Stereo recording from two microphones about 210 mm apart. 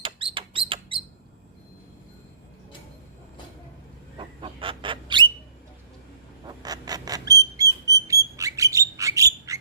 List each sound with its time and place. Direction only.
0.0 s rodents: 25° right (ahead or behind)
4.2 s chicken: 25° right (ahead or behind)
6.6 s a sound: 20° right (ahead or behind)
7.5 s rodents: 15° right (ahead or behind)
9.0 s bird: 15° right (ahead or behind)